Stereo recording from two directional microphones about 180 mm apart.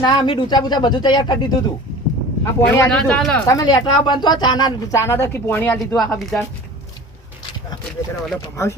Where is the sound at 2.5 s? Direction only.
15° left (ahead or behind).